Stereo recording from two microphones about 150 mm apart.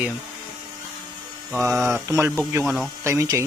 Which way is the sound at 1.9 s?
20° right (ahead or behind).